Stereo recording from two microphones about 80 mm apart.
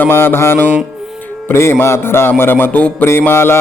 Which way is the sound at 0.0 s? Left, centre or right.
Left.